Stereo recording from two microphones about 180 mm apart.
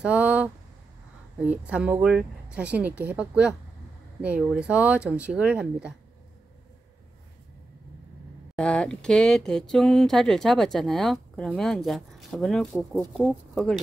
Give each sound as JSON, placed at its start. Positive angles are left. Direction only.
{"t": 0.0, "sound": "speech", "side_deg": -5}
{"t": 8.5, "sound": "speech", "side_deg": 5}